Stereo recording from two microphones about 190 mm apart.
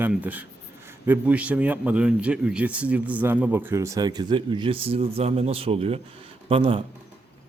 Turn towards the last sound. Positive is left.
turn(degrees=-30)  # may be behind; listen again after turning